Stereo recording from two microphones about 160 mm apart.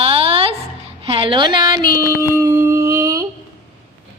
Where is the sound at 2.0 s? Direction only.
15° left (ahead or behind).